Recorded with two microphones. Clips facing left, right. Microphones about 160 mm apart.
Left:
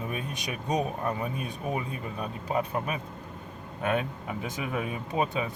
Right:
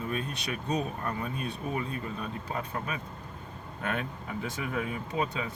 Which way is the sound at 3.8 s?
20° left (ahead or behind).